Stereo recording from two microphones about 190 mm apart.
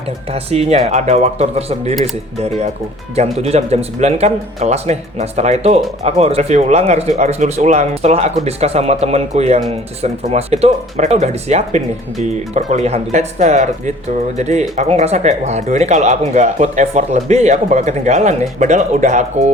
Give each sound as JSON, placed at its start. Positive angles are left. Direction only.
{"t": 0.3, "sound": "speech", "side_deg": -30}
{"t": 3.2, "sound": "speech", "side_deg": -35}